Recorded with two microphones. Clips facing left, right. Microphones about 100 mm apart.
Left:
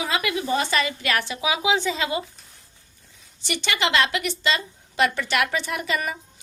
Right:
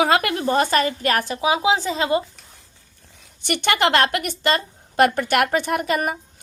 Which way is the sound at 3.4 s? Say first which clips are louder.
Right 6 dB; 55° right (ahead or behind).